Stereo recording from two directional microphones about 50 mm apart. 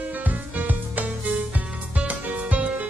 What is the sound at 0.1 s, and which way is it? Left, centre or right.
Music, right.